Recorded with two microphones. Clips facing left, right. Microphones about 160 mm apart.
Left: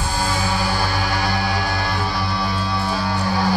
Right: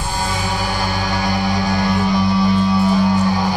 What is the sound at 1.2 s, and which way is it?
Music, 15° right (ahead or behind).